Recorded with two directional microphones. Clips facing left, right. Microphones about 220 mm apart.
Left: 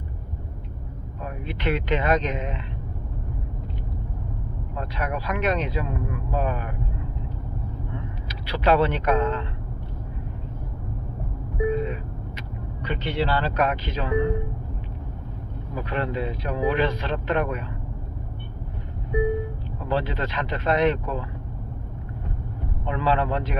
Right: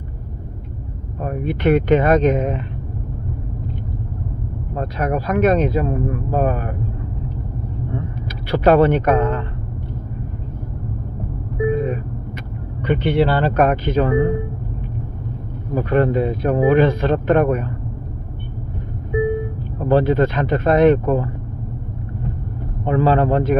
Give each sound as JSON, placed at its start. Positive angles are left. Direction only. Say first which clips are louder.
{"t": 1.2, "sound": "speech", "louder": "right 10 dB", "side_deg": -45}
{"t": 4.7, "sound": "speech", "louder": "right 8 dB", "side_deg": -45}
{"t": 8.4, "sound": "speech", "louder": "right 8 dB", "side_deg": -50}
{"t": 12.8, "sound": "speech", "louder": "right 10 dB", "side_deg": -55}
{"t": 15.7, "sound": "speech", "louder": "right 11 dB", "side_deg": -45}
{"t": 19.8, "sound": "speech", "louder": "right 11 dB", "side_deg": -50}
{"t": 22.9, "sound": "speech", "louder": "right 8 dB", "side_deg": -45}